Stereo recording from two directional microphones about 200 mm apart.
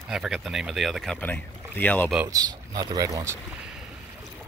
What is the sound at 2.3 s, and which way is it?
Speech, 20° right (ahead or behind).